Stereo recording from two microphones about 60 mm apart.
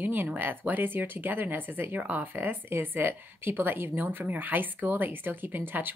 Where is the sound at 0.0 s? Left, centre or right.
Right.